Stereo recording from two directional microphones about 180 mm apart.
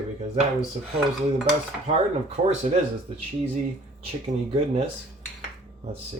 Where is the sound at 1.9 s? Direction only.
35° right (ahead or behind).